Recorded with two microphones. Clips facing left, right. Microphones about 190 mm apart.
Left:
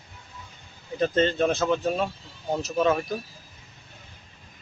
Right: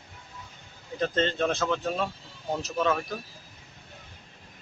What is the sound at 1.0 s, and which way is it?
Speech, 10° left (ahead or behind).